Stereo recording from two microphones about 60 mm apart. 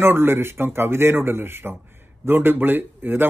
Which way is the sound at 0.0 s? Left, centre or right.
Right.